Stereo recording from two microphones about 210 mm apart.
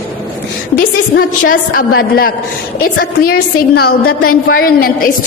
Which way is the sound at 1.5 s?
45° left (ahead or behind).